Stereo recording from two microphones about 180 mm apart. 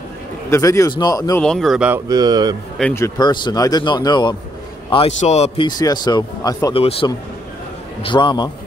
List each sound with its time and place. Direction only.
0.5 s a man's voice: 15° left (ahead or behind)
1.4 s speech: 5° left (ahead or behind)
2.0 s speech: 20° right (ahead or behind)
2.8 s a man's voice: 15° left (ahead or behind); by 5.7 s 35° left (ahead or behind)
5.7 s a man's voice: 20° left (ahead or behind)
6.8 s a man's voice: 35° left (ahead or behind)